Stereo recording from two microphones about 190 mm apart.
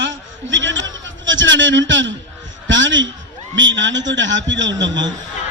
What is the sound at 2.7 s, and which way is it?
A man's voice, 75° right (ahead or behind).